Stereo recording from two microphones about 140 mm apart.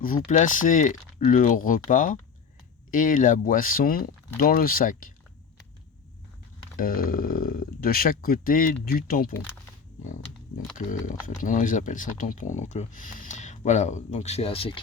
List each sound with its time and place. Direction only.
0.0 s speech: 70° left (ahead or behind)
6.7 s speech: 90° left
10.8 s speech: 70° left (ahead or behind); by 14.7 s 45° left (ahead or behind)